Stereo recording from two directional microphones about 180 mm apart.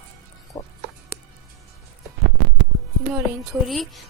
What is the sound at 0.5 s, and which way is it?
Music, 25° left (ahead or behind).